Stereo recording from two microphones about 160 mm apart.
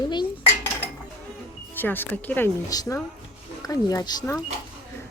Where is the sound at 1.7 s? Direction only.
10° left (ahead or behind).